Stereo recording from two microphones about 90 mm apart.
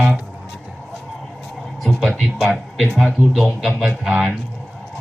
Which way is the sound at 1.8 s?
5° left (ahead or behind).